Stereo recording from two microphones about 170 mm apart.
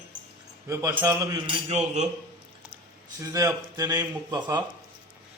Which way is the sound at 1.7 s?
40° right (ahead or behind).